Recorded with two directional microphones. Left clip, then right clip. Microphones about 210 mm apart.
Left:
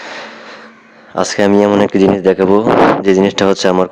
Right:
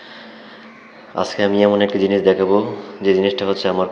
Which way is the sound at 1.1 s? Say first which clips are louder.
Left 6 dB; 40° left (ahead or behind).